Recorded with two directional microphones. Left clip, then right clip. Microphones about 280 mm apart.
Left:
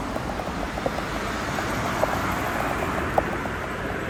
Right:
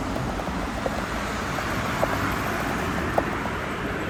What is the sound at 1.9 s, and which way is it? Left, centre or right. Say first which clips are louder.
Vehicle: left 1 dB; left.